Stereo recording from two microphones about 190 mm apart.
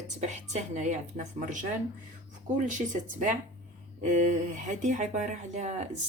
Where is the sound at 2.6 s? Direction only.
40° right (ahead or behind).